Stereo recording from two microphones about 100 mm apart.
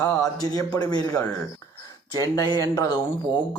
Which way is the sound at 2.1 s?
40° left (ahead or behind).